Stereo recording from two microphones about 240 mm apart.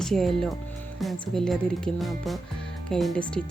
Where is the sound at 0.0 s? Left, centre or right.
Centre.